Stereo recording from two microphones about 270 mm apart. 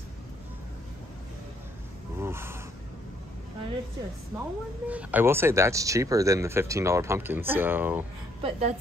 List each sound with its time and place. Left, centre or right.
2.1 s a sound: centre
4.3 s speech: centre
8.4 s a woman's voice: right